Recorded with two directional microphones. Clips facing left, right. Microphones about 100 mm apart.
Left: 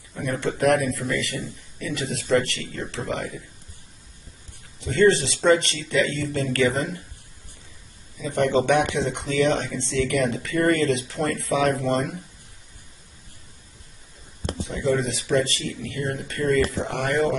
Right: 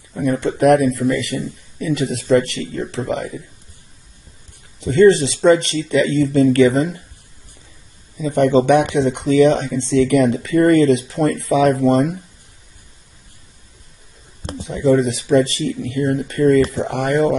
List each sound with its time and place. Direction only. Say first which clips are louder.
0.1 s a man's voice: right 7 dB; 15° right (ahead or behind)
4.9 s a man's voice: right 7 dB; 15° right (ahead or behind)
8.2 s speech: right 7 dB; 20° right (ahead or behind)
14.4 s a man's voice: right 7 dB; 20° right (ahead or behind)